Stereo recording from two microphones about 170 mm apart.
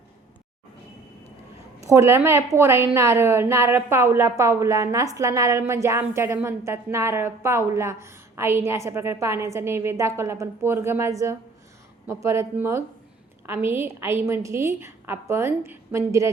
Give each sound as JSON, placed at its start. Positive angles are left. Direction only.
{"t": 1.9, "sound": "a woman's voice", "side_deg": -15}